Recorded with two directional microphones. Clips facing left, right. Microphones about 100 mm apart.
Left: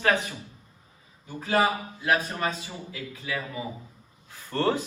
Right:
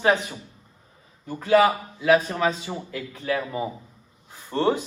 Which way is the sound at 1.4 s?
90° right.